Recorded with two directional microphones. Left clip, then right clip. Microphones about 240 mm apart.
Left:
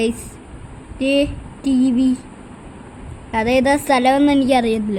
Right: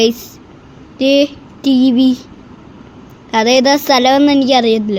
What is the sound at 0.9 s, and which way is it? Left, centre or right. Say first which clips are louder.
Child singing: right 6 dB; centre.